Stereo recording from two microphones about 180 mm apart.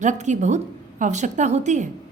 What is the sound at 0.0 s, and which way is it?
A woman's voice, 40° right (ahead or behind).